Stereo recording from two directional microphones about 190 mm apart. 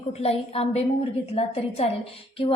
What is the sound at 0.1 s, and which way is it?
A woman's voice, 30° left (ahead or behind).